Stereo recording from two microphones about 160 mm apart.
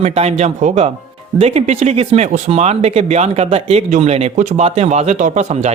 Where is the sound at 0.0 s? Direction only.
40° right (ahead or behind).